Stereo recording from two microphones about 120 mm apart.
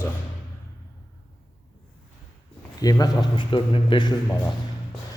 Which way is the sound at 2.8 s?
30° left (ahead or behind).